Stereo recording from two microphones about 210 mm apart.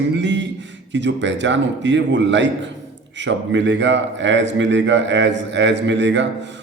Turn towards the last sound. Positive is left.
turn(degrees=-60)  # may be behind; listen again after turning